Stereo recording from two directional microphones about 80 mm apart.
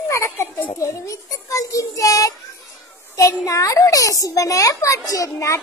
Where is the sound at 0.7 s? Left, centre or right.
Left.